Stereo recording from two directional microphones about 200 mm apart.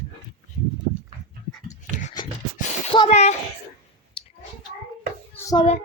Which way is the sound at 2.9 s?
30° left (ahead or behind).